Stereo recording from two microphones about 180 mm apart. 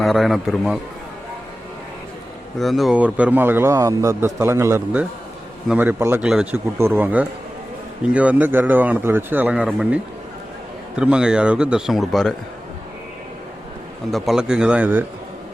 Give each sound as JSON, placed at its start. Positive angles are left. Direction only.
{"t": 0.0, "sound": "speech", "side_deg": 0}
{"t": 2.6, "sound": "a man's voice", "side_deg": 0}
{"t": 14.1, "sound": "speech", "side_deg": 0}